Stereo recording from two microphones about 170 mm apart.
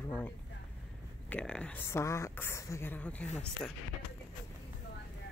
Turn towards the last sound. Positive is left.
turn(degrees=5)  # may be behind; listen again after turning